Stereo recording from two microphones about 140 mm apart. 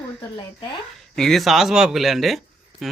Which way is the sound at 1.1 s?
5° left (ahead or behind).